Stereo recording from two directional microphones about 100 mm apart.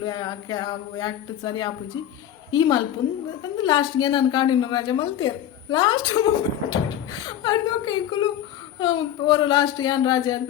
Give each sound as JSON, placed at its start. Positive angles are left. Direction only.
{"t": 0.0, "sound": "a woman's voice", "side_deg": 45}
{"t": 2.5, "sound": "a woman's voice", "side_deg": 45}